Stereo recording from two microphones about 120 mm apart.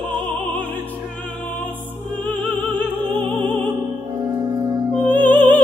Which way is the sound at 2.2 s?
15° left (ahead or behind).